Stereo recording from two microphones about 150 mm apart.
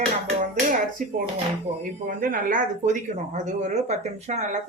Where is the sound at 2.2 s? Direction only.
65° right (ahead or behind).